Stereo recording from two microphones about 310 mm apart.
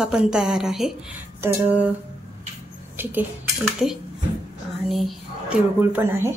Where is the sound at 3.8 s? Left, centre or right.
Centre.